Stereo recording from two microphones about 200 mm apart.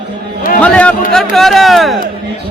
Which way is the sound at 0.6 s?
5° left (ahead or behind).